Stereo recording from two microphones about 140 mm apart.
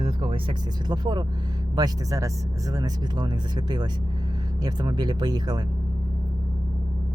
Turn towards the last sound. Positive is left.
turn(degrees=-30)  # may be behind; listen again after turning